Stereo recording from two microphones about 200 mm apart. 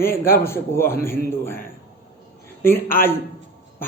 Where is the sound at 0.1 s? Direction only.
45° left (ahead or behind).